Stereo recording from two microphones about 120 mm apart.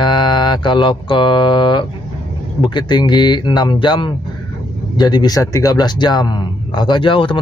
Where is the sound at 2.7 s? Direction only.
40° left (ahead or behind).